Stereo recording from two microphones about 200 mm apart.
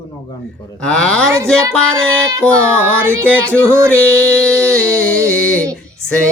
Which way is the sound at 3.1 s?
5° left (ahead or behind).